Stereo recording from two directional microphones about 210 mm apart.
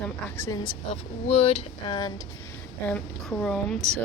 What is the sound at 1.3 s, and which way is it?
Speech, 30° left (ahead or behind).